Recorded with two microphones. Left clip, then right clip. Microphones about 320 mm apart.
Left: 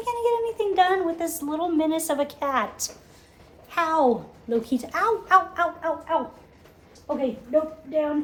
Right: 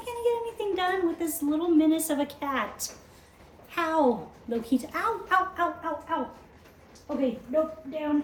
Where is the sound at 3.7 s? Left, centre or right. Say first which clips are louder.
Left 4 dB; centre.